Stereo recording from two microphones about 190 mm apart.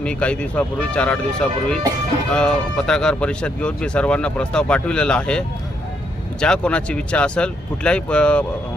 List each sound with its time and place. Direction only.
0.0 s speech: 5° left (ahead or behind)